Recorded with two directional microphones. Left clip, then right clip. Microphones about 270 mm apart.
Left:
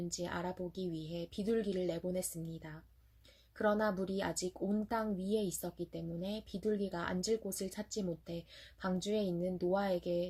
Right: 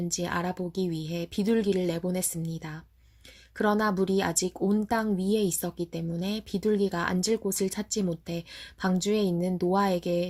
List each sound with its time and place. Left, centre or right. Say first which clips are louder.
0.1 s speech: right 12 dB; right